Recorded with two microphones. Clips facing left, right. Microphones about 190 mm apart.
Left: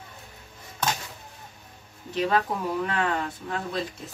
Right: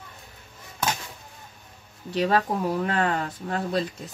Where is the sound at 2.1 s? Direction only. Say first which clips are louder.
Right 2 dB; 40° right (ahead or behind).